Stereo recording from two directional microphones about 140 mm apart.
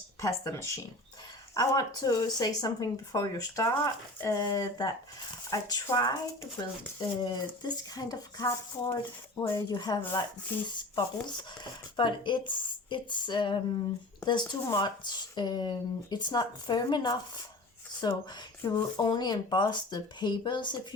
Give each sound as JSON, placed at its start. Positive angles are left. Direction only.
{"t": 0.2, "sound": "speech", "side_deg": 20}